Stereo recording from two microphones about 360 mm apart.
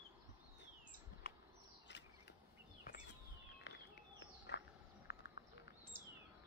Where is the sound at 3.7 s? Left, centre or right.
Left.